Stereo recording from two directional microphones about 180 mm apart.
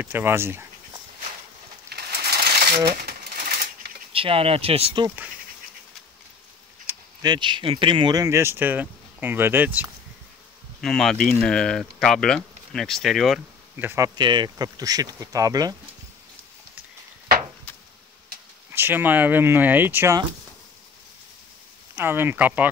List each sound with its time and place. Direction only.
0.0 s speech: 10° right (ahead or behind)
1.9 s coin: 60° right (ahead or behind)
4.1 s speech: 30° right (ahead or behind)
5.0 s speech: 10° right (ahead or behind)
6.9 s speech: 20° right (ahead or behind)
10.8 s speech: centre (ahead or behind)
13.7 s speech: 15° right (ahead or behind)
18.7 s speech: 10° right (ahead or behind)
21.9 s speech: 10° right (ahead or behind)